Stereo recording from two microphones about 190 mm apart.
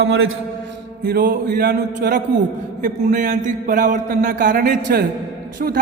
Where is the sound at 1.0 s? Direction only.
50° right (ahead or behind).